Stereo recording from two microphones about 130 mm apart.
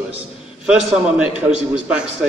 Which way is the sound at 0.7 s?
5° right (ahead or behind).